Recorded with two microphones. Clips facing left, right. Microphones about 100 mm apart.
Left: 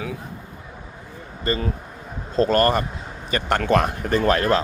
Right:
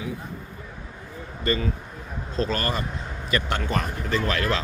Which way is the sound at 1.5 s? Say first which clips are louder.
Left 1 dB; 35° left (ahead or behind).